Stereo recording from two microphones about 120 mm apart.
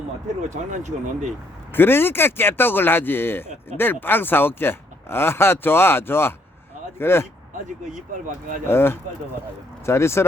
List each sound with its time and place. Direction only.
0.5 s speech: 90° right
1.7 s speech: 15° left (ahead or behind)
8.6 s speech: 20° left (ahead or behind)